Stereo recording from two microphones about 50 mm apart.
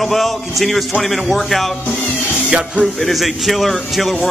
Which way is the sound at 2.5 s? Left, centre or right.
Right.